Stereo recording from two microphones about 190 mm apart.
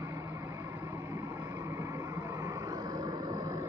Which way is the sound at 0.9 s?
15° right (ahead or behind).